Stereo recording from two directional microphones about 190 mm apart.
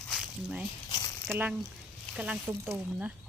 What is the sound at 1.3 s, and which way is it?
Speech, 10° right (ahead or behind).